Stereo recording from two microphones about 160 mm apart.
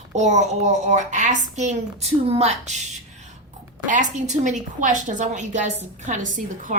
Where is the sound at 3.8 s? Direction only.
50° right (ahead or behind).